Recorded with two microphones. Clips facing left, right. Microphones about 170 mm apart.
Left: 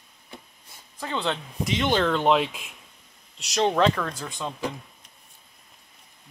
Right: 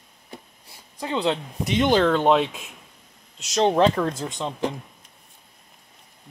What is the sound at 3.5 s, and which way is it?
Speech, 30° right (ahead or behind).